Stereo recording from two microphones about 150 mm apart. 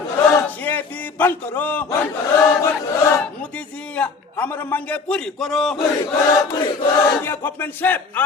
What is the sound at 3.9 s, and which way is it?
Battle cry, 10° left (ahead or behind).